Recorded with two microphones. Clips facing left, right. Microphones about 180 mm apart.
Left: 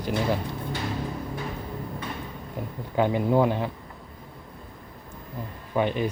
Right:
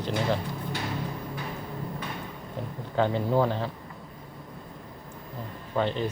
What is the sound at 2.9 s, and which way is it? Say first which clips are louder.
Speech: left 2 dB; 15° left (ahead or behind).